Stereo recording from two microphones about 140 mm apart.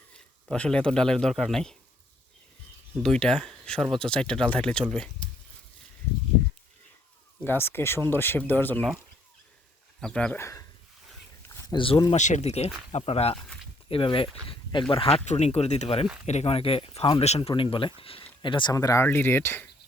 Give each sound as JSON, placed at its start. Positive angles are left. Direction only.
{"t": 0.5, "sound": "speech", "side_deg": 10}
{"t": 3.0, "sound": "speech", "side_deg": 5}
{"t": 7.4, "sound": "speech", "side_deg": 15}
{"t": 10.0, "sound": "speech", "side_deg": 5}
{"t": 10.4, "sound": "speech", "side_deg": 25}
{"t": 11.7, "sound": "speech", "side_deg": 40}
{"t": 12.1, "sound": "speech", "side_deg": 55}